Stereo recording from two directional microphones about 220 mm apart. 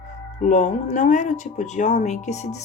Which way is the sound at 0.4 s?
35° left (ahead or behind).